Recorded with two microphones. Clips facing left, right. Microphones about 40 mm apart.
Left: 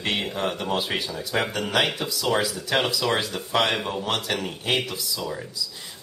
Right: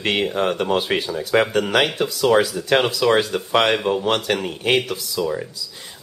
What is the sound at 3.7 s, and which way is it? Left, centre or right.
Speech, centre.